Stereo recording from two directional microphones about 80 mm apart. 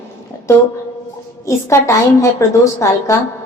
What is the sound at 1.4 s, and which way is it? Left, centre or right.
A woman's voice, left.